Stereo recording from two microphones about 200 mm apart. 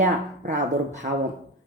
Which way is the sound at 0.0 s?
35° right (ahead or behind).